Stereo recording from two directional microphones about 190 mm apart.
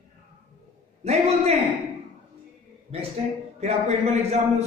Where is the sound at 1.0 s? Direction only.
35° right (ahead or behind).